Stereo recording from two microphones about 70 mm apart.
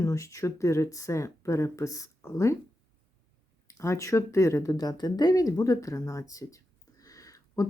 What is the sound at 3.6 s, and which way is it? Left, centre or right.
Speech, left.